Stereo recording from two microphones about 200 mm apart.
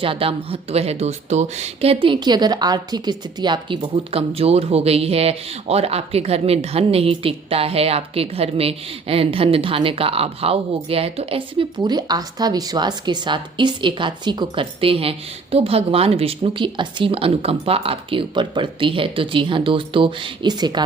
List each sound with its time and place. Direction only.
0.0 s speech: 25° right (ahead or behind)